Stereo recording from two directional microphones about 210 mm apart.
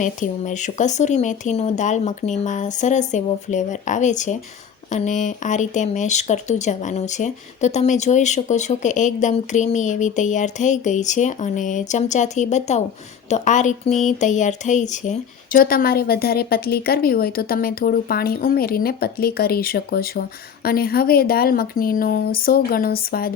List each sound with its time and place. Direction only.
0.0 s speech: 35° left (ahead or behind)